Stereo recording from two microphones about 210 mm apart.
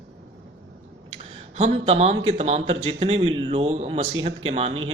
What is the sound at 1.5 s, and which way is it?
A man's voice, 30° right (ahead or behind).